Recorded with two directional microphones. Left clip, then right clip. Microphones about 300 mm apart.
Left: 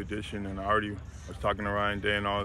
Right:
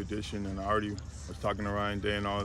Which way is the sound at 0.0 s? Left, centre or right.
Centre.